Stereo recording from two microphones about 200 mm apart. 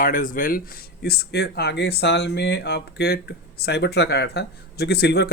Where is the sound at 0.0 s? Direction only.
40° left (ahead or behind).